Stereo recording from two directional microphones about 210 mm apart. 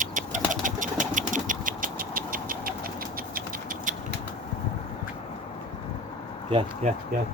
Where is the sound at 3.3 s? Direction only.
40° right (ahead or behind).